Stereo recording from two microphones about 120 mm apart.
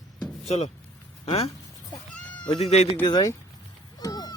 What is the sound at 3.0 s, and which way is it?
Speech, 35° left (ahead or behind).